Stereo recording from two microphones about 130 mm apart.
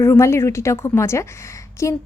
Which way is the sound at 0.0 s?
20° left (ahead or behind).